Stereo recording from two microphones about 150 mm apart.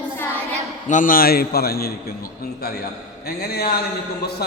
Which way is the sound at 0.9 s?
65° left (ahead or behind).